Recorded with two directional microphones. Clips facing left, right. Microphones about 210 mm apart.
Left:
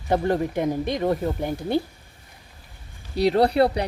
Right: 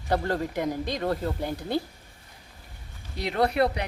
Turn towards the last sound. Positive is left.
turn(degrees=30)  # may be behind; listen again after turning